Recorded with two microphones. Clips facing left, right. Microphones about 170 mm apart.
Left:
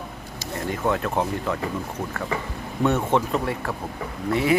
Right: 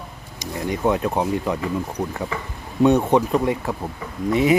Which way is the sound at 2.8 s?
15° right (ahead or behind).